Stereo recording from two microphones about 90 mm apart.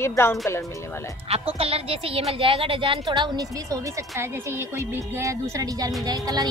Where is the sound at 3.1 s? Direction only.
45° right (ahead or behind).